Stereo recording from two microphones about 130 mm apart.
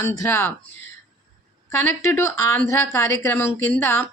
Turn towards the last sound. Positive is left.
turn(degrees=20)  # may be behind; listen again after turning